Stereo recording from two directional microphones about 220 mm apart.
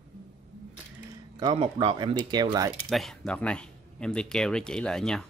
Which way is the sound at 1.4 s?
20° right (ahead or behind).